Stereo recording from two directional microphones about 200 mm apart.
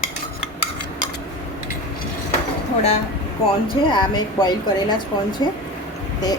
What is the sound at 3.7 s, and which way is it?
Speech, 20° left (ahead or behind).